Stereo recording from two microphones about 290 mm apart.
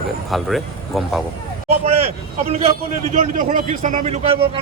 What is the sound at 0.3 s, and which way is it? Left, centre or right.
Speech, centre.